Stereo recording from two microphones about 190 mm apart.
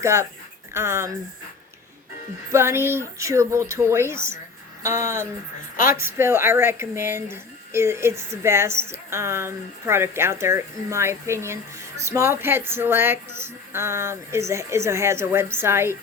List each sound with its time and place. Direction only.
0.0 s speech: 15° right (ahead or behind)
2.5 s speech: 15° right (ahead or behind)
5.7 s speech: 45° left (ahead or behind)
6.0 s speech: 10° right (ahead or behind)